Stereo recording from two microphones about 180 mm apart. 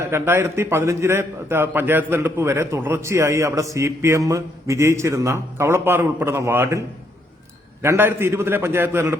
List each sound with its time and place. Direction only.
0.0 s a man's voice: 15° right (ahead or behind)